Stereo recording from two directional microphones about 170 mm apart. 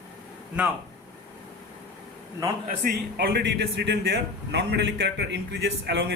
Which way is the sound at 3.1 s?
70° right (ahead or behind).